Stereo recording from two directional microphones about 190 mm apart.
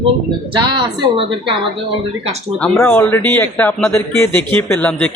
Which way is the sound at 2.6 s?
5° left (ahead or behind).